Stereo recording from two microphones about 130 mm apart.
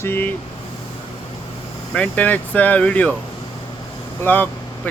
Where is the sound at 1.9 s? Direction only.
10° left (ahead or behind).